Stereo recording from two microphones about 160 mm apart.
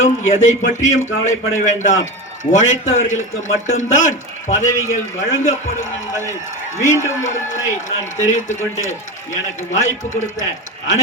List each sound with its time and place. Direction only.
0.0 s a man's voice: 50° left (ahead or behind)